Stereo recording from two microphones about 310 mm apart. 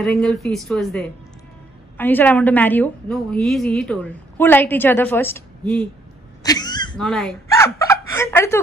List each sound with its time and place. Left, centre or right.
0.0 s a woman's voice: centre
6.4 s throat clearing: centre
7.0 s speech: centre